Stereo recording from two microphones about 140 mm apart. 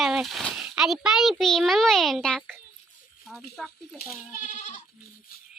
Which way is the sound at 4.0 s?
65° left (ahead or behind).